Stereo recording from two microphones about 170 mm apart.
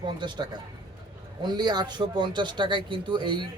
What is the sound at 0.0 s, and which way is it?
Speech, 25° right (ahead or behind).